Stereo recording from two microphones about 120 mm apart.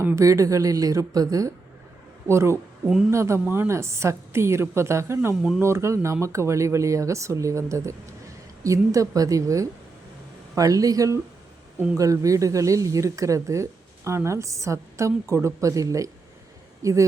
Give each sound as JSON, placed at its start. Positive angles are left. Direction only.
{"t": 0.0, "sound": "speech", "side_deg": -20}